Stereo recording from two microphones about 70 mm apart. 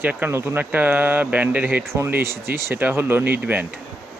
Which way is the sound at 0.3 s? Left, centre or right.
Right.